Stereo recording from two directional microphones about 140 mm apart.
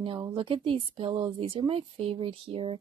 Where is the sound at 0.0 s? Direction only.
40° right (ahead or behind).